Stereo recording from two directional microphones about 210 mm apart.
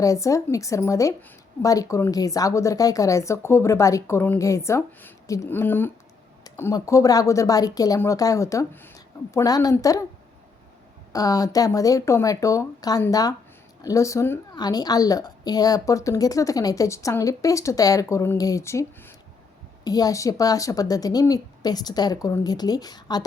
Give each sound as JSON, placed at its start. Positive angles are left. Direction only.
{"t": 0.0, "sound": "a woman's voice", "side_deg": 15}
{"t": 11.1, "sound": "a woman's voice", "side_deg": 15}